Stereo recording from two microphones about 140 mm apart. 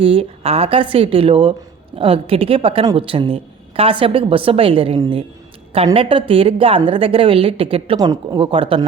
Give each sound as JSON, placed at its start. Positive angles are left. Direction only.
{"t": 0.0, "sound": "a woman's voice", "side_deg": -45}
{"t": 7.9, "sound": "a woman's voice", "side_deg": -30}